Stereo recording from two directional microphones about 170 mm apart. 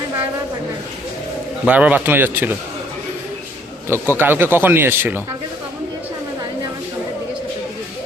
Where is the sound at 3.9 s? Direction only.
10° right (ahead or behind).